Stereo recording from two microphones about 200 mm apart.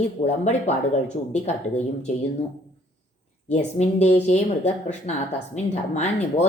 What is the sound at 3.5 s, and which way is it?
A woman's voice, 35° left (ahead or behind).